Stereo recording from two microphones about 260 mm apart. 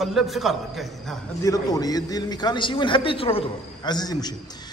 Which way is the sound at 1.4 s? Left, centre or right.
Centre.